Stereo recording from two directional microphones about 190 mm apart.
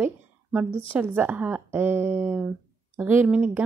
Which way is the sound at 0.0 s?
5° right (ahead or behind).